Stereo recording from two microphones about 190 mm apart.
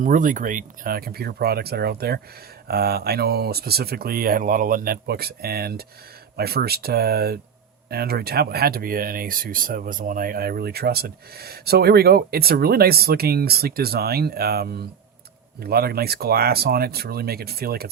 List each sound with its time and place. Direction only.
0.0 s speech: 45° right (ahead or behind)